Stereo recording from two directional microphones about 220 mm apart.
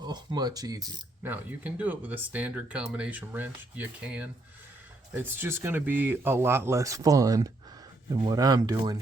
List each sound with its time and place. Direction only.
0.0 s speech: 20° right (ahead or behind)